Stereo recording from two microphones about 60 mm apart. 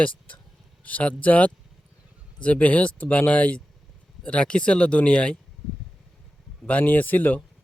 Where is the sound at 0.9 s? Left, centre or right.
Left.